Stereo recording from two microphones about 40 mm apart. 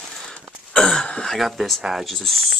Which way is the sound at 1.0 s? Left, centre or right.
Left.